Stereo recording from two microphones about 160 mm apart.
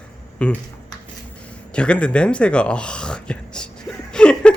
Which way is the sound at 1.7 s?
5° left (ahead or behind).